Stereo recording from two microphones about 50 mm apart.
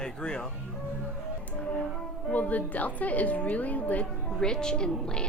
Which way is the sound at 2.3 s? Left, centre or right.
Left.